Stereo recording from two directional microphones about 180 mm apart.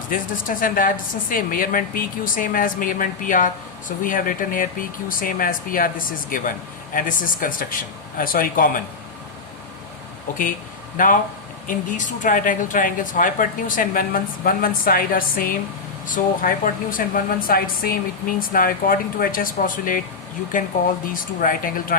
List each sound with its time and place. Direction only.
0.1 s a woman's voice: 50° left (ahead or behind)
10.9 s a woman's voice: 50° left (ahead or behind)